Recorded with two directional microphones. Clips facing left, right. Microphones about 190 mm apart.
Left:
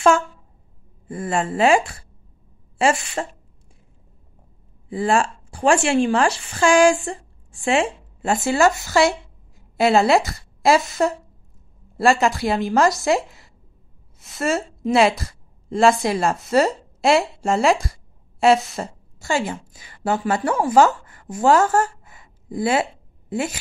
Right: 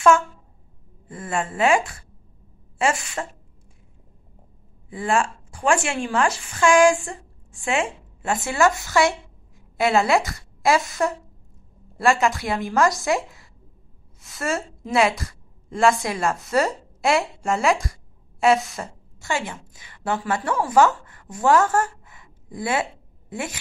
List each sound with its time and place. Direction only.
1.0 s speech: 30° left (ahead or behind)
4.8 s a woman's voice: 35° left (ahead or behind)